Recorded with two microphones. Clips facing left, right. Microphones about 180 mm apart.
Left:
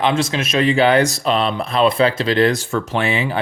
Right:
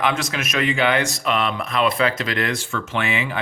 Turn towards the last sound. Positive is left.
turn(degrees=35)  # may be behind; listen again after turning